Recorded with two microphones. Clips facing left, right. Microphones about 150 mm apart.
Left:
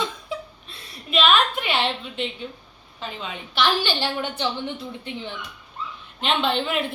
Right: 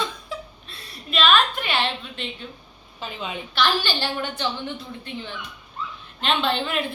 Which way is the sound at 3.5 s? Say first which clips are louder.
Left 1 dB; 20° left (ahead or behind).